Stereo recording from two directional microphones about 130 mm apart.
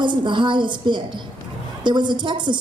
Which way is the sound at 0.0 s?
35° right (ahead or behind).